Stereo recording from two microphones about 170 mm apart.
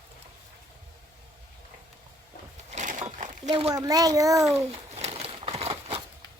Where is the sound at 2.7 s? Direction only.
45° right (ahead or behind).